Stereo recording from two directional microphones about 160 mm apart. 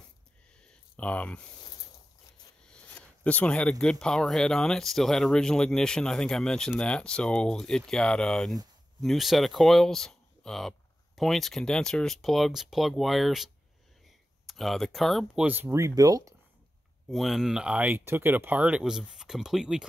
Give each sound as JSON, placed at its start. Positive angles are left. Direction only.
{"t": 0.7, "sound": "a sound", "side_deg": 10}
{"t": 2.6, "sound": "speech", "side_deg": 5}
{"t": 15.4, "sound": "speech", "side_deg": -15}
{"t": 17.1, "sound": "speech", "side_deg": 0}